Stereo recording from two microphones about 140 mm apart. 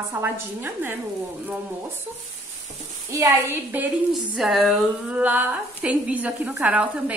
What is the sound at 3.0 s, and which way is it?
Speech, 20° right (ahead or behind).